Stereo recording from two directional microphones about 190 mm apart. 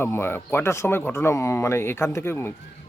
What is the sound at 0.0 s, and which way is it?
Speech, 10° left (ahead or behind).